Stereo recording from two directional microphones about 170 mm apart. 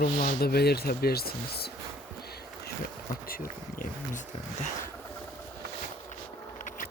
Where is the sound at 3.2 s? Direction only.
55° left (ahead or behind).